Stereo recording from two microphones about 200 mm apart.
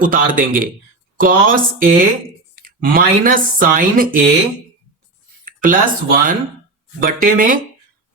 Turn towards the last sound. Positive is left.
turn(degrees=-45)  # may be behind; listen again after turning